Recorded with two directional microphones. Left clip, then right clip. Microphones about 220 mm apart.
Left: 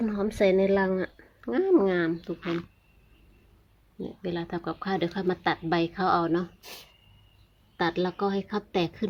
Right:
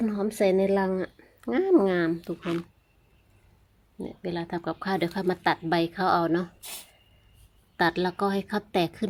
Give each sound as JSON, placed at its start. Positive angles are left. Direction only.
{"t": 0.0, "sound": "speech", "side_deg": -10}
{"t": 2.4, "sound": "speech", "side_deg": 0}
{"t": 4.0, "sound": "speech", "side_deg": -10}
{"t": 7.8, "sound": "a woman's voice", "side_deg": -20}